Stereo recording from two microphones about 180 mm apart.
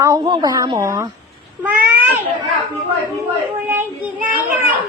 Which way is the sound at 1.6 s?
10° right (ahead or behind).